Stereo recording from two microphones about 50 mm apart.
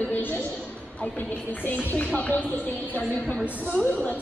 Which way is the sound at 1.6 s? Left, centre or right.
Left.